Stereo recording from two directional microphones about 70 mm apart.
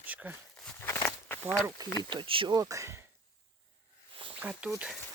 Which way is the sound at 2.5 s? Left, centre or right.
Right.